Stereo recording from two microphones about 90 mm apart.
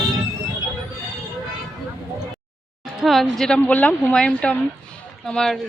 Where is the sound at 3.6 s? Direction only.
15° left (ahead or behind).